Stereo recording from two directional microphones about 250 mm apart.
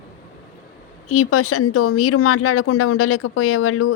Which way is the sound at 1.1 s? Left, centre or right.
Left.